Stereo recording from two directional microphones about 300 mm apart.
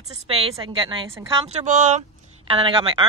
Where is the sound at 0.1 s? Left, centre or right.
Centre.